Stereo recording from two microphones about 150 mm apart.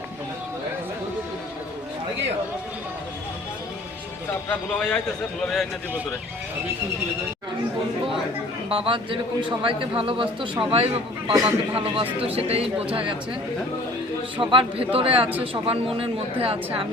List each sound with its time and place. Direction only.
4.4 s a man's voice: 5° left (ahead or behind)
8.7 s a man's voice: 35° right (ahead or behind)
14.5 s a man's voice: 35° right (ahead or behind)